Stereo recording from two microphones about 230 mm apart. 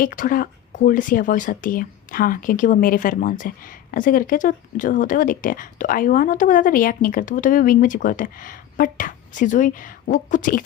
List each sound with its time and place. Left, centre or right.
0.0 s speech: left